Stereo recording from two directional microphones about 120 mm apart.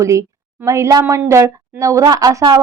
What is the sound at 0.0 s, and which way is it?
A woman's voice, 25° right (ahead or behind).